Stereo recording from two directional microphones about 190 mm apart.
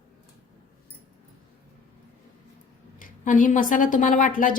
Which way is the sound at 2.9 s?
45° left (ahead or behind).